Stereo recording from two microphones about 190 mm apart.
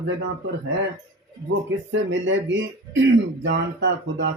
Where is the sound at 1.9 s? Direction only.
80° right.